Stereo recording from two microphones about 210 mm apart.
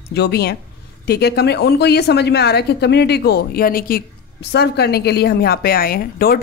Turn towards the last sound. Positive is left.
turn(degrees=45)  # may be behind; listen again after turning